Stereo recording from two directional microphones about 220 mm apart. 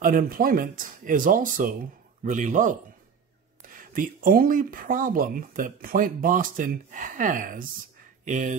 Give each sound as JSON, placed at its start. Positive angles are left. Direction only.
{"t": 0.0, "sound": "speech", "side_deg": -40}